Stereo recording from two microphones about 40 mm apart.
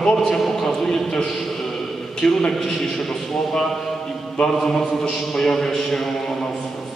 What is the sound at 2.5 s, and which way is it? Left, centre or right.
A man's voice, centre.